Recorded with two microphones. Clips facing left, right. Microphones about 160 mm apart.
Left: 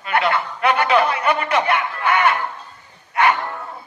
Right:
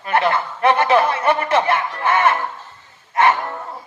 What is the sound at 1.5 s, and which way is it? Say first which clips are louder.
Snicker: right 2 dB; 30° right (ahead or behind).